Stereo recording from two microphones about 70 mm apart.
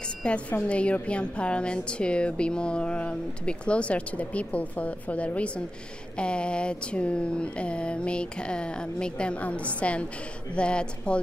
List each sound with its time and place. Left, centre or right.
0.2 s a woman's voice: centre